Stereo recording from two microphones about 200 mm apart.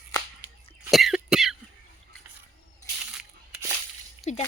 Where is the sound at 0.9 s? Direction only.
Centre (ahead or behind).